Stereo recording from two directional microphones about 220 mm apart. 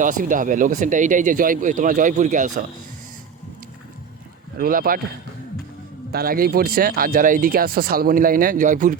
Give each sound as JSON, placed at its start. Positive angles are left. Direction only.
{"t": 0.0, "sound": "speech", "side_deg": -35}
{"t": 4.5, "sound": "speech", "side_deg": -40}
{"t": 6.1, "sound": "speech", "side_deg": -45}